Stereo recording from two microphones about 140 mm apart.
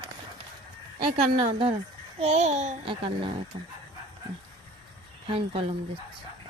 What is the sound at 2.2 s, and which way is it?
Speech, 50° right (ahead or behind).